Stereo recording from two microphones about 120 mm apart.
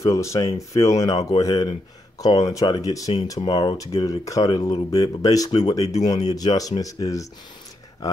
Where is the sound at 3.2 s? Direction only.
40° left (ahead or behind).